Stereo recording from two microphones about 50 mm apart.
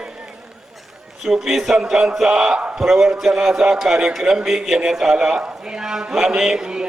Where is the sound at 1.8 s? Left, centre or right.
Centre.